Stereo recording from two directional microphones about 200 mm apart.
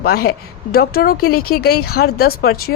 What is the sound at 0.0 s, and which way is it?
A woman's voice, 50° left (ahead or behind).